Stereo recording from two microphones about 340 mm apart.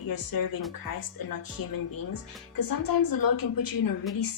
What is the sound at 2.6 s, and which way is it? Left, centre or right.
A woman's voice, left.